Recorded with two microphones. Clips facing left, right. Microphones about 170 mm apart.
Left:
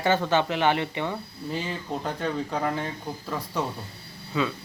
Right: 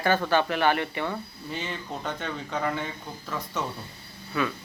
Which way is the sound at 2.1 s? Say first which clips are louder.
Left 4 dB; 35° left (ahead or behind).